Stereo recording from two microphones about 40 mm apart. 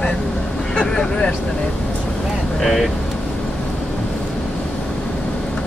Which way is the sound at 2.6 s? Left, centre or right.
Centre.